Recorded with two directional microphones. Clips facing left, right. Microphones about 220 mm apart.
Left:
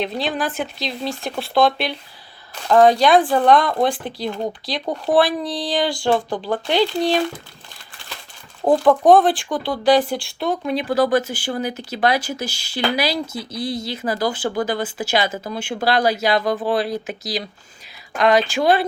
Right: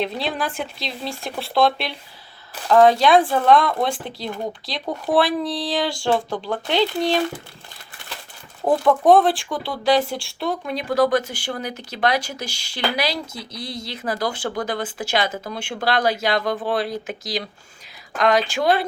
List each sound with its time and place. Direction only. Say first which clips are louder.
0.0 s speech: left 2 dB; centre (ahead or behind)
3.2 s speech: left 1 dB; centre (ahead or behind)
8.9 s speech: left 1 dB; centre (ahead or behind)